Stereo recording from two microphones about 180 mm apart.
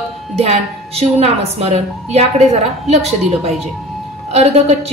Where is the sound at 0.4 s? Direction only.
35° right (ahead or behind).